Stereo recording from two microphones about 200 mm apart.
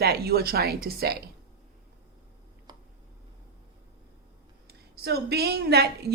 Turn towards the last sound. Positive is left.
turn(degrees=-55)  # may be behind; listen again after turning